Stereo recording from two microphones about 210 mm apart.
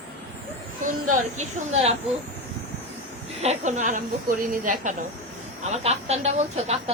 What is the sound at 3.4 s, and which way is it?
A woman's voice, 35° right (ahead or behind).